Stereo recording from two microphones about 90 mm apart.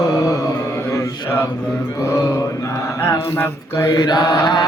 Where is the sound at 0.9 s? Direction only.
30° left (ahead or behind).